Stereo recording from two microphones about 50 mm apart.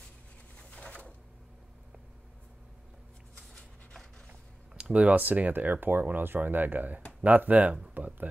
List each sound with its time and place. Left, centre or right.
0.6 s pigeon: left
3.3 s a sound: centre
4.7 s speech: right